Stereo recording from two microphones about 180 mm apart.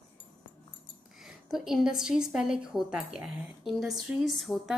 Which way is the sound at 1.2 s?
Centre (ahead or behind).